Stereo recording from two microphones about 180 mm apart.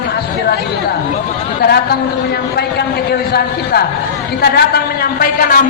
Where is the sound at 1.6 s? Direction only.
60° left (ahead or behind).